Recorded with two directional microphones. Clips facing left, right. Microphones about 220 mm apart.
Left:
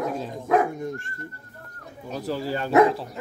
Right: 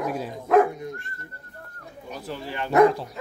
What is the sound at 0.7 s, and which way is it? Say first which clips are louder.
Dog: left 4 dB; 45° left (ahead or behind).